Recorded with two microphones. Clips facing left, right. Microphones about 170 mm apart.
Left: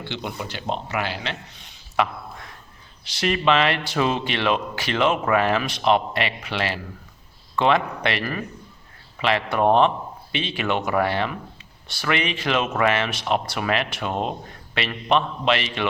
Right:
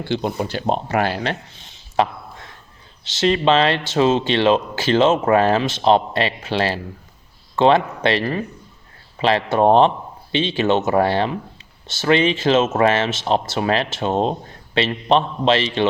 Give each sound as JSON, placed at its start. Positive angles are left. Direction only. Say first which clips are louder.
{"t": 0.0, "sound": "speech", "louder": "right 9 dB", "side_deg": -40}
{"t": 1.5, "sound": "a sound", "louder": "right 3 dB", "side_deg": -25}
{"t": 3.2, "sound": "speech", "louder": "right 4 dB", "side_deg": -30}